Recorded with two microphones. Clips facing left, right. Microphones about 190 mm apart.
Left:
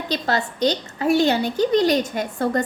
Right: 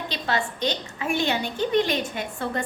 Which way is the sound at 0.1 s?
40° left (ahead or behind).